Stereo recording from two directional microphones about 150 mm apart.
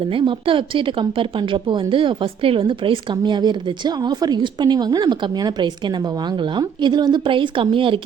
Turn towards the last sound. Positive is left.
turn(degrees=-35)  # may be behind; listen again after turning